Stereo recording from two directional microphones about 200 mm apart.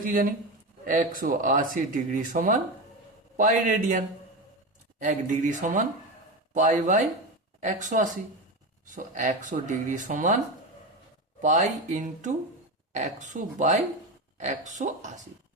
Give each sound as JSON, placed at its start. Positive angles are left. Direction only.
{"t": 0.0, "sound": "a man's voice", "side_deg": -45}
{"t": 11.3, "sound": "speech", "side_deg": -35}